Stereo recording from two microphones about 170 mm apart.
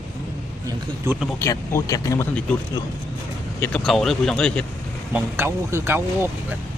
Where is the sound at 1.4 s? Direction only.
15° left (ahead or behind).